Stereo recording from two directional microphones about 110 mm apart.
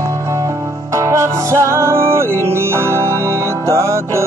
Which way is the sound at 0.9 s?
30° right (ahead or behind).